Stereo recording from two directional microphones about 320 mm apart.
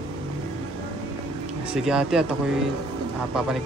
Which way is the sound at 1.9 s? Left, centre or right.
Centre.